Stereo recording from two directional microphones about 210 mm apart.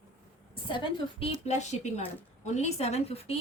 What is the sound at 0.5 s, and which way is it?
A woman's voice, 25° left (ahead or behind).